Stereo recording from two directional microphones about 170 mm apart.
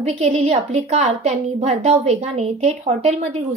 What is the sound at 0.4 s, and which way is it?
A woman's voice, 40° right (ahead or behind).